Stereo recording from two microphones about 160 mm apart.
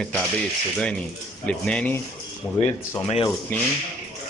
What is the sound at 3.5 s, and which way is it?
Speech, 10° left (ahead or behind).